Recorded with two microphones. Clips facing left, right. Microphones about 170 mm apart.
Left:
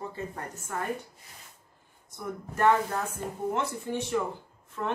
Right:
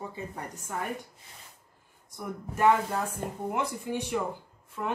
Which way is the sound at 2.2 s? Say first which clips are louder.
Even; 10° right (ahead or behind).